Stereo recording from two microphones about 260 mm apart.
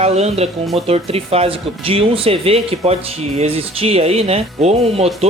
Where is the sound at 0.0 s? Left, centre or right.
Right.